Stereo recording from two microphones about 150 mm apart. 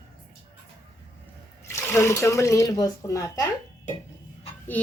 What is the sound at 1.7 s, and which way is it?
Speech, 15° left (ahead or behind).